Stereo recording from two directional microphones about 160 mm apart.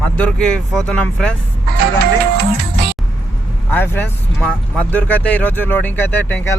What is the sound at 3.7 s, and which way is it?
Speech, 10° left (ahead or behind).